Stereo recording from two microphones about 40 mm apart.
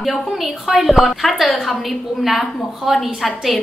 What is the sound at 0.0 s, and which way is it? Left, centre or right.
A woman's voice, centre.